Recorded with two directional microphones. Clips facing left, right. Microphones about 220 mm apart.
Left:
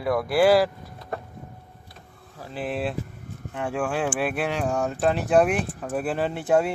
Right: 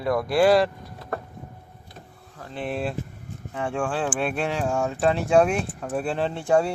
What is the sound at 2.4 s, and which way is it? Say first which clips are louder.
Speech: even; 5° left (ahead or behind).